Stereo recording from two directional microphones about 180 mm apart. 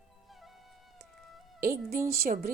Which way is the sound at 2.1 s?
60° right (ahead or behind).